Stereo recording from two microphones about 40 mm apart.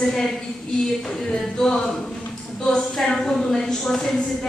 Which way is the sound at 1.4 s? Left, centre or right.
Centre.